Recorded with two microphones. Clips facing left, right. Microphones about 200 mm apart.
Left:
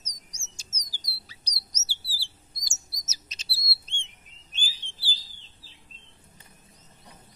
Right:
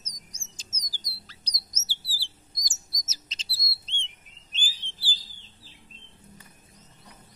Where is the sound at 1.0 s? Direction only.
10° left (ahead or behind).